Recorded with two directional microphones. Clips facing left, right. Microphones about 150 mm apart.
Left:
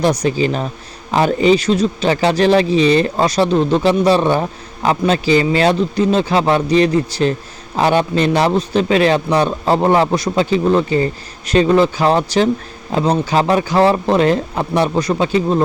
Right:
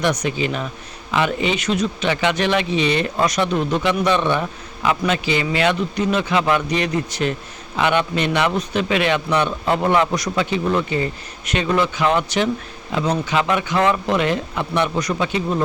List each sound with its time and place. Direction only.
0.0 s speech: 35° left (ahead or behind)